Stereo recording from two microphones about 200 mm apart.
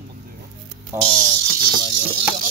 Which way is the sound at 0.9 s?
10° right (ahead or behind).